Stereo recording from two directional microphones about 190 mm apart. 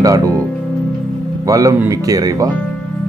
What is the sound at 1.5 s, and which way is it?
Speech, 15° right (ahead or behind).